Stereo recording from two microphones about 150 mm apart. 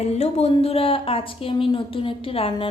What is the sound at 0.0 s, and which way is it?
Speech, 45° left (ahead or behind).